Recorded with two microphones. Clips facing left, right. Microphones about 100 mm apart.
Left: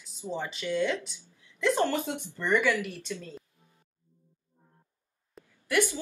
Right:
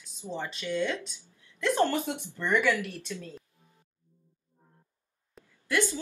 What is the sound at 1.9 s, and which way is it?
Speech, 15° right (ahead or behind).